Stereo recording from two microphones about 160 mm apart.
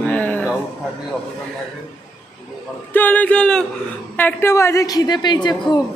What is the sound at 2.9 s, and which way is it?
A woman's voice, 10° left (ahead or behind).